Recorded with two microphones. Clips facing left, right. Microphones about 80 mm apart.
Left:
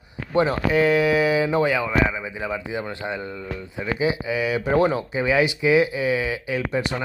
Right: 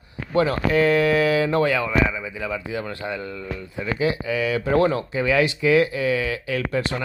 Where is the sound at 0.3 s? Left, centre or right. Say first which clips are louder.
Even; left.